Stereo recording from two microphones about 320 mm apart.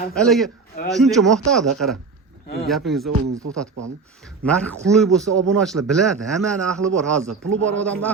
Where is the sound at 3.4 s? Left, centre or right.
Right.